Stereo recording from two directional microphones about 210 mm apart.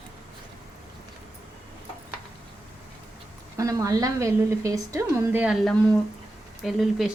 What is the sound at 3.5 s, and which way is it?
A woman's voice, 15° right (ahead or behind).